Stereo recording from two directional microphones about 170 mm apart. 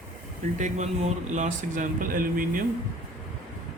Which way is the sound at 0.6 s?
45° right (ahead or behind).